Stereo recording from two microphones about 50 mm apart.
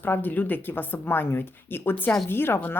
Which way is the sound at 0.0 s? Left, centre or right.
Left.